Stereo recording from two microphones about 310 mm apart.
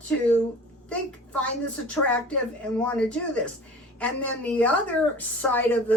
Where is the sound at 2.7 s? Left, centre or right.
Centre.